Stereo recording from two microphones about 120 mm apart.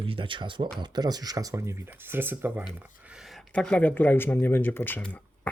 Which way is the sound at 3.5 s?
10° left (ahead or behind).